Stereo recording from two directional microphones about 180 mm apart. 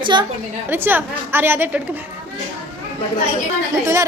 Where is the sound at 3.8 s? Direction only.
15° right (ahead or behind).